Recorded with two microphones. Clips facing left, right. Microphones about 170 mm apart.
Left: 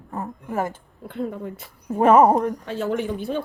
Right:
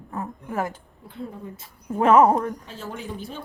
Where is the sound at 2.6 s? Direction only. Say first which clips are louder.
Left 11 dB; 70° left (ahead or behind).